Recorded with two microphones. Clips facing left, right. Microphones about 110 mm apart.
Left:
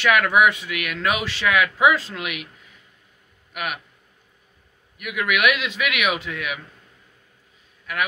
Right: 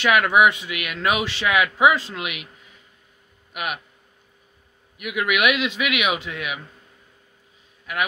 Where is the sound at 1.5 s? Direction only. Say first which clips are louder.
Even; 5° right (ahead or behind).